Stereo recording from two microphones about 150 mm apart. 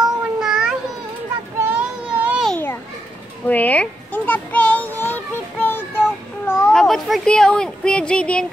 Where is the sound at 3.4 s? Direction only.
10° left (ahead or behind).